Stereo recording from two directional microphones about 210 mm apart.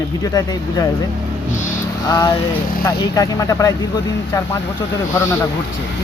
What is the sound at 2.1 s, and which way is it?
Speech, 20° left (ahead or behind).